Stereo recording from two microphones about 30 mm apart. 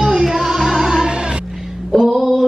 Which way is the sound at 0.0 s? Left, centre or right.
Centre.